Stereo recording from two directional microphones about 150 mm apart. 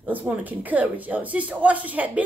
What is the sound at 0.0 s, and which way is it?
Speech, 10° right (ahead or behind).